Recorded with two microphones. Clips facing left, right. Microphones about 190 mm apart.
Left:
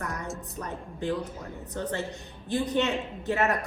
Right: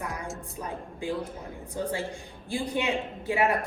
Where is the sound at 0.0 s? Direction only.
10° right (ahead or behind).